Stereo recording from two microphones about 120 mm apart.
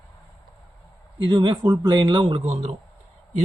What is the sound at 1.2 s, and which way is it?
Speech, 40° right (ahead or behind).